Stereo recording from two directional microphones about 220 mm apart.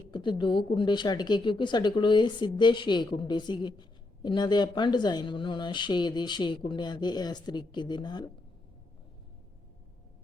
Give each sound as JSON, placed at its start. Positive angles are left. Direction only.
{"t": 0.1, "sound": "speech", "side_deg": 20}